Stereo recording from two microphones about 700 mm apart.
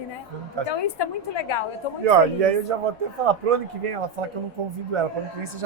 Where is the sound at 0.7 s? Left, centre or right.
Left.